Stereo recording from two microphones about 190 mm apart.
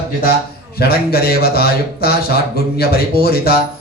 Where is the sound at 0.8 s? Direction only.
55° left (ahead or behind).